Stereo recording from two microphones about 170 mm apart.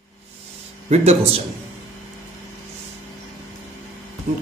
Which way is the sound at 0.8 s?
40° right (ahead or behind).